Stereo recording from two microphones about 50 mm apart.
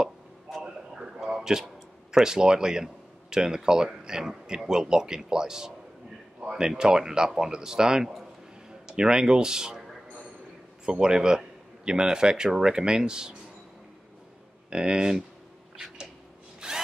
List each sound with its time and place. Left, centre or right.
0.7 s a sound: centre
1.2 s a man's voice: centre
10.9 s a man's voice: centre
14.7 s a man's voice: centre
16.6 s wood: centre